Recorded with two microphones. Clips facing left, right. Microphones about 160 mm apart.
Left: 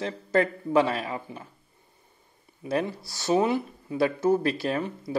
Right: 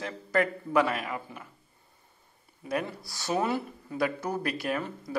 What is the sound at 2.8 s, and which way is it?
Speech, 25° left (ahead or behind).